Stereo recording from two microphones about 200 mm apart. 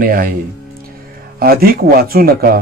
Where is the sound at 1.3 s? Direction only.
50° right (ahead or behind).